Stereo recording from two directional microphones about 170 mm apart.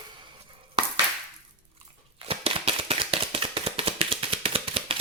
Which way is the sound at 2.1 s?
35° right (ahead or behind).